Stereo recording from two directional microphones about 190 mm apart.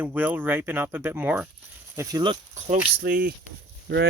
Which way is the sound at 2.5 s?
45° right (ahead or behind).